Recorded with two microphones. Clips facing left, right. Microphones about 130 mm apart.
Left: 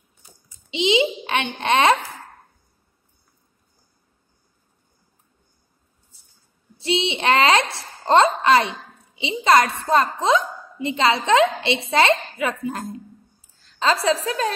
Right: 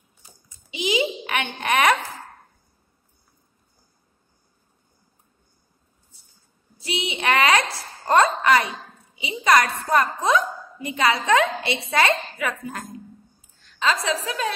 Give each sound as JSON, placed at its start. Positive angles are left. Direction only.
{"t": 0.7, "sound": "a woman's voice", "side_deg": 25}
{"t": 6.8, "sound": "a woman's voice", "side_deg": 25}
{"t": 13.6, "sound": "a woman's voice", "side_deg": 35}